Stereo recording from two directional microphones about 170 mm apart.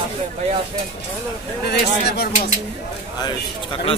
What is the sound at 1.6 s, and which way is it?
Speech, 70° left (ahead or behind).